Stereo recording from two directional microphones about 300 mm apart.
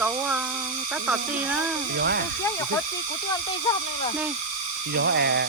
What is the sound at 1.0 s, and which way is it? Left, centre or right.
Speech, centre.